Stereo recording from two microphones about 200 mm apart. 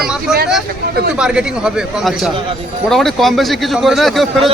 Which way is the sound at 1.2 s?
5° right (ahead or behind).